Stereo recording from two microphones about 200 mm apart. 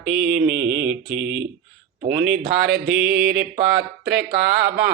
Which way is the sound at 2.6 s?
Centre (ahead or behind).